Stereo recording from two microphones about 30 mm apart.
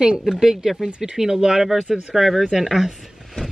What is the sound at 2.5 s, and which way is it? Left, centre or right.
Speech, centre.